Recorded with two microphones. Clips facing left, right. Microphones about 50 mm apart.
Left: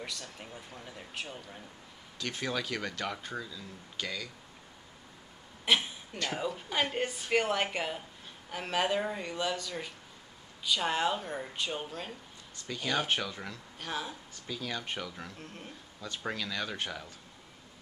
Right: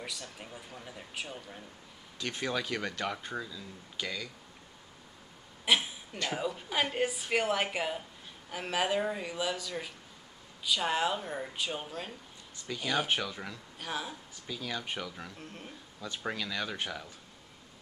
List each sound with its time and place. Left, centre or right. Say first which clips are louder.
0.0 s speech: even; centre
2.1 s speech: right 1 dB; right
3.3 s speech: right 1 dB; centre
5.7 s speech: even; centre